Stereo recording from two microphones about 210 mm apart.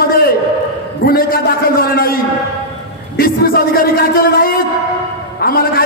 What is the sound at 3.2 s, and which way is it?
A man's voice, 45° left (ahead or behind).